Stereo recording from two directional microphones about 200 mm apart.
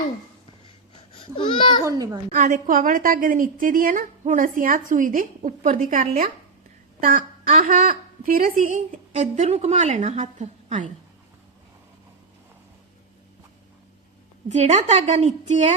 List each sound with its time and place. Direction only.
1.4 s a child's voice: 25° left (ahead or behind)
1.8 s a child's voice: 15° right (ahead or behind)
2.3 s a woman's voice: 35° right (ahead or behind)
14.5 s a woman's voice: 35° right (ahead or behind)